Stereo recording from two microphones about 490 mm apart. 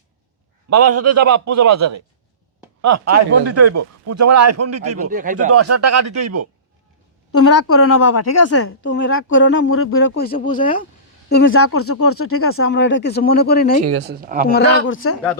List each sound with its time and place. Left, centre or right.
0.7 s speech: right
5.1 s speech: centre
5.5 s speech: right
7.3 s a woman's voice: left
13.8 s speech: right
14.4 s a woman's voice: centre